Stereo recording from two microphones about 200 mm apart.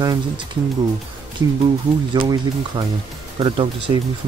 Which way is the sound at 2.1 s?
20° right (ahead or behind).